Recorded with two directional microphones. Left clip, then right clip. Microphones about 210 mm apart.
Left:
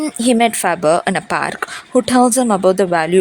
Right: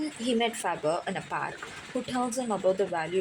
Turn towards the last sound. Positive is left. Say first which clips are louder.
# left 13 dB
turn(degrees=50)  # may be behind; listen again after turning